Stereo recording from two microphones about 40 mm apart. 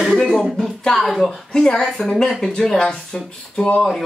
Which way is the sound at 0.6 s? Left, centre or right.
Centre.